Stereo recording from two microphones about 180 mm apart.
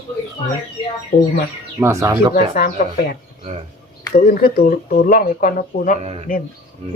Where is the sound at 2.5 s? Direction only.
55° left (ahead or behind).